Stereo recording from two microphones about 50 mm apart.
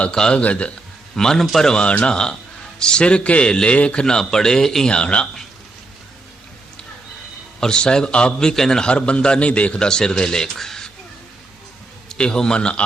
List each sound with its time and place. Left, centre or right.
0.1 s a man's voice: centre
0.3 s a man's voice: left
1.1 s a man's voice: centre
1.8 s a man's voice: left
4.9 s a man's voice: left
7.6 s a man's voice: centre
12.1 s a man's voice: centre